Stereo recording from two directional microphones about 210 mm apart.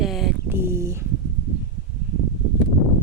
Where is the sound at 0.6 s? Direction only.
15° right (ahead or behind).